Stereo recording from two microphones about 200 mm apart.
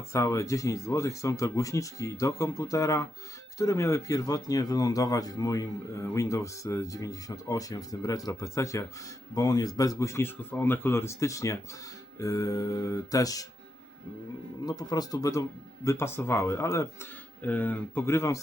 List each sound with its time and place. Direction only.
0.1 s speech: 15° left (ahead or behind)
14.6 s speech: 20° left (ahead or behind)